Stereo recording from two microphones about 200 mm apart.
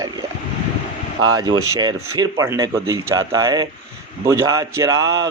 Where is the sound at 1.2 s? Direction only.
20° right (ahead or behind).